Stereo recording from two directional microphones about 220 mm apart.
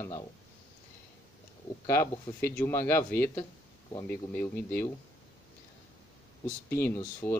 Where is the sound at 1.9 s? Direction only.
10° left (ahead or behind).